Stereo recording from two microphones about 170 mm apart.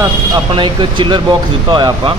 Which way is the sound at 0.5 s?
30° right (ahead or behind).